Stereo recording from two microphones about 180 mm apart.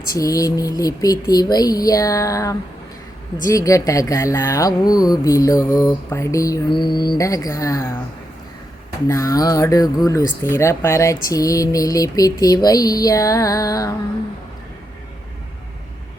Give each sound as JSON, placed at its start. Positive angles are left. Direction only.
{"t": 0.1, "sound": "speech", "side_deg": 20}
{"t": 9.0, "sound": "speech", "side_deg": 20}